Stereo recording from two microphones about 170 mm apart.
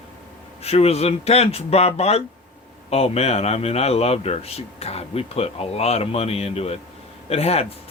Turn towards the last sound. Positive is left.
turn(degrees=35)  # may be behind; listen again after turning